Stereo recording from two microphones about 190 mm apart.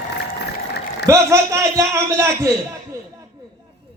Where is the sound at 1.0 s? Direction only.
15° right (ahead or behind).